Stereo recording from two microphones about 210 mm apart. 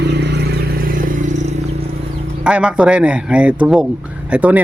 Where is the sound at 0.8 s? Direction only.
40° right (ahead or behind).